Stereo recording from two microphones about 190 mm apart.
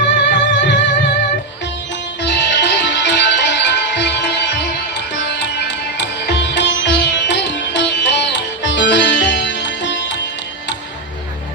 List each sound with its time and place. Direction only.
0.3 s music: 65° left (ahead or behind)
2.2 s music: 65° left (ahead or behind)